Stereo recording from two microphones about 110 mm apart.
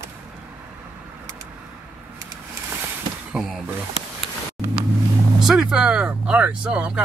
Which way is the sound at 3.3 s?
5° right (ahead or behind).